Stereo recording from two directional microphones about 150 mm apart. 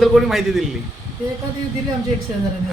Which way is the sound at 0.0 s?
Centre (ahead or behind).